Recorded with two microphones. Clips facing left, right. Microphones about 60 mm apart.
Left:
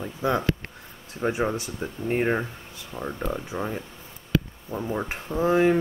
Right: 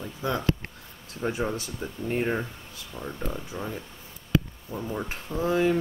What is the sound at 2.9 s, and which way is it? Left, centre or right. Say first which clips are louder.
Speech: left 4 dB; centre.